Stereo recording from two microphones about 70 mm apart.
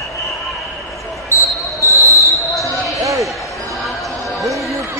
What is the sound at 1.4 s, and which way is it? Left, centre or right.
Basketball bounce, left.